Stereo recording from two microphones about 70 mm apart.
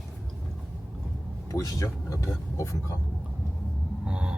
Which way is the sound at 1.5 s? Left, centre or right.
Left.